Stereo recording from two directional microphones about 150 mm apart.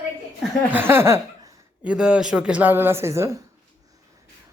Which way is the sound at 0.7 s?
15° right (ahead or behind).